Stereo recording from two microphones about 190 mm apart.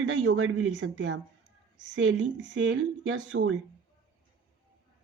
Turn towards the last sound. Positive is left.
turn(degrees=-90)